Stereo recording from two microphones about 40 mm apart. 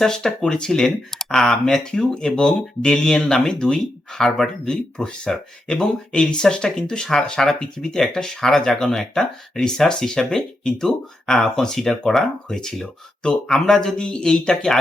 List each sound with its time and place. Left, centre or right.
0.0 s speech: centre
2.5 s speech: left
2.9 s speech: centre
4.9 s speech: left